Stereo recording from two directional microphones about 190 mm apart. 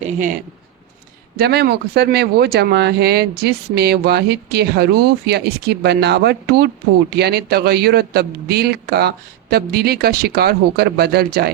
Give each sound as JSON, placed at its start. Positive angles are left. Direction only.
{"t": 0.0, "sound": "speech", "side_deg": -40}
{"t": 1.4, "sound": "speech", "side_deg": -55}